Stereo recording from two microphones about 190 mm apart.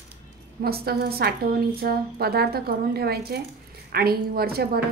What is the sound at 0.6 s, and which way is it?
A woman's voice, 55° right (ahead or behind).